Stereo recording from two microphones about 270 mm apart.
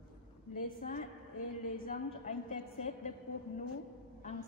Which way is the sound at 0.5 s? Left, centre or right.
Left.